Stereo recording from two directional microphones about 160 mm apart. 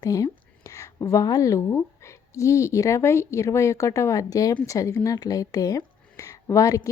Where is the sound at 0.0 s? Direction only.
25° left (ahead or behind).